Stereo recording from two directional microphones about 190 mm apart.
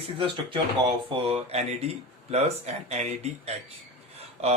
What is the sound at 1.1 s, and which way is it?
Speech, 25° right (ahead or behind).